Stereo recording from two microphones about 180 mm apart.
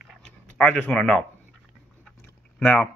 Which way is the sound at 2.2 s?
10° left (ahead or behind).